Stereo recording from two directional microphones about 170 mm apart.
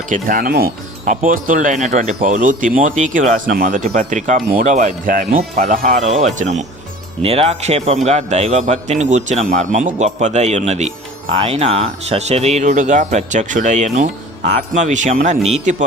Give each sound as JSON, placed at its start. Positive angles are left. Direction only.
{"t": 0.1, "sound": "speech", "side_deg": -55}
{"t": 1.0, "sound": "speech", "side_deg": -50}